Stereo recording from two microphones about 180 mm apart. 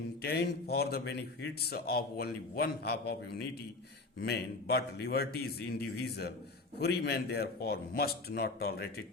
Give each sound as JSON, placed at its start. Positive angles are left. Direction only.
{"t": 0.2, "sound": "a man's voice", "side_deg": 65}